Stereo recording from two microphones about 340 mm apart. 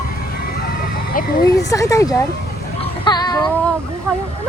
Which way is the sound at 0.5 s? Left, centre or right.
Left.